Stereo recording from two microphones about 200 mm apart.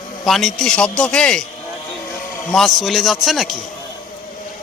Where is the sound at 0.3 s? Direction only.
Centre (ahead or behind).